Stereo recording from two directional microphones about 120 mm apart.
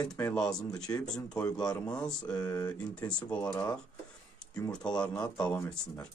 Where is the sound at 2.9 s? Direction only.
10° left (ahead or behind).